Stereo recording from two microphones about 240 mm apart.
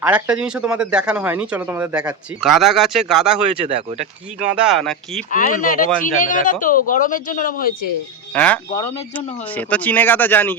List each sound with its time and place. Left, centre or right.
0.0 s speech: centre
3.5 s speech: right
4.5 s speech: centre
5.3 s speech: left
8.3 s speech: centre